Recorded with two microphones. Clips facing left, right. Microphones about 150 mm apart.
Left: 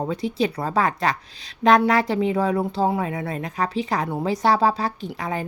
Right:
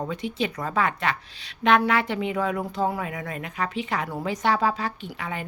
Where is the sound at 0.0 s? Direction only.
35° left (ahead or behind).